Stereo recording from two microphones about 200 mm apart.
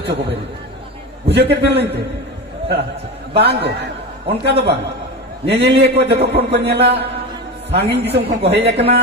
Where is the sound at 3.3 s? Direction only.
55° right (ahead or behind).